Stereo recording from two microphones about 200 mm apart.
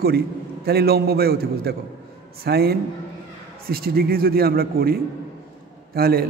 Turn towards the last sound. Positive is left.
turn(degrees=-50)  # may be behind; listen again after turning